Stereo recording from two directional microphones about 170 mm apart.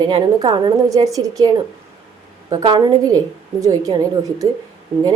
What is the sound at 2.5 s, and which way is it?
A woman's voice, 30° right (ahead or behind).